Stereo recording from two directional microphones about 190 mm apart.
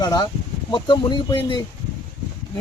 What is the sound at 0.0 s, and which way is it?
Speech, 20° left (ahead or behind).